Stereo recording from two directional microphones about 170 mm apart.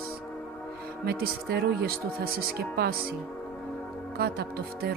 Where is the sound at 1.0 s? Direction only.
65° right (ahead or behind).